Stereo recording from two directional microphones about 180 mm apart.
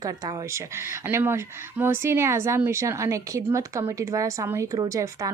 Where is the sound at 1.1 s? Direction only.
15° right (ahead or behind).